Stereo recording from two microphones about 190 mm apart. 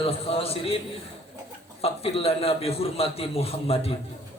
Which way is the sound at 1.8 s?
30° left (ahead or behind).